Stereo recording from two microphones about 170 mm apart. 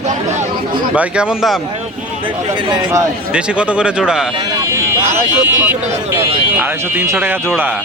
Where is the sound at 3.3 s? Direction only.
5° right (ahead or behind).